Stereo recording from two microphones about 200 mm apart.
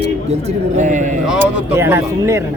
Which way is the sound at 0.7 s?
40° right (ahead or behind).